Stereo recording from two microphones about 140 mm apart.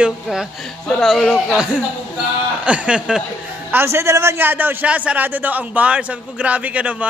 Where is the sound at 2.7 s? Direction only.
10° right (ahead or behind).